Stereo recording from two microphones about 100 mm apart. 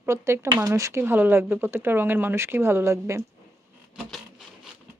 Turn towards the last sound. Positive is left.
turn(degrees=-30)  # may be behind; listen again after turning